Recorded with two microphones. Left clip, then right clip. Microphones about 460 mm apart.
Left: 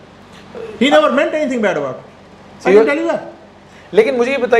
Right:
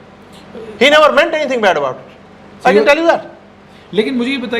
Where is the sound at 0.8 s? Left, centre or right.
Right.